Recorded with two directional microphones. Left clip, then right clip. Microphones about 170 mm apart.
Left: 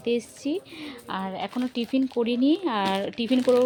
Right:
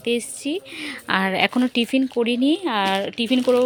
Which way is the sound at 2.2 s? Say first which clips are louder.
Right 2 dB; 5° right (ahead or behind).